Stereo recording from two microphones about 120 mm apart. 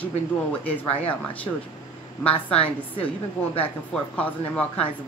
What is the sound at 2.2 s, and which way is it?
Speech, 50° left (ahead or behind).